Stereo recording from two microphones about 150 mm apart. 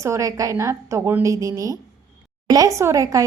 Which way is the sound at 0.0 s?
20° right (ahead or behind).